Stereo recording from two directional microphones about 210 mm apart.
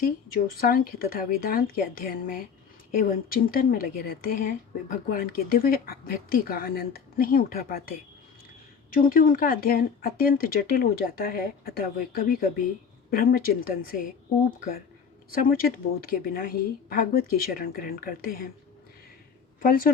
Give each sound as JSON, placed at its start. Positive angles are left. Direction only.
{"t": 0.3, "sound": "speech", "side_deg": 45}
{"t": 15.4, "sound": "speech", "side_deg": 45}